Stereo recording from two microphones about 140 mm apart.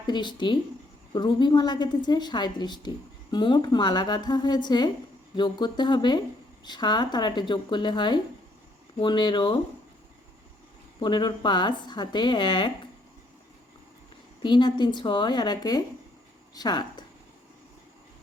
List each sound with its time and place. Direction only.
0.1 s a woman's voice: 35° left (ahead or behind)
11.0 s a woman's voice: 30° left (ahead or behind)
14.4 s a woman's voice: 35° left (ahead or behind)